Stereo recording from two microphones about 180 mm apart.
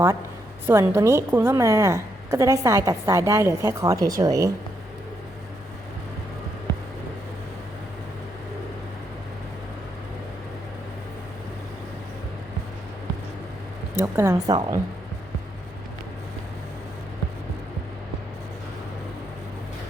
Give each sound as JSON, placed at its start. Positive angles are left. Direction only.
{"t": 0.7, "sound": "a woman's voice", "side_deg": -15}
{"t": 14.0, "sound": "a woman's voice", "side_deg": -15}